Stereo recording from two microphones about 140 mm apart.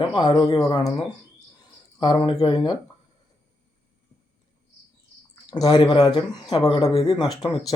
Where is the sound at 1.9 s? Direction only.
30° left (ahead or behind).